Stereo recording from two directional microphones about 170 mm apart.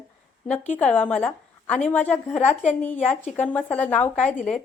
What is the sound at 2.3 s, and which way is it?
Speech, 40° left (ahead or behind).